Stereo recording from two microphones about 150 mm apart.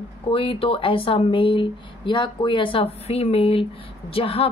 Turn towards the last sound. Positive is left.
turn(degrees=40)  # may be behind; listen again after turning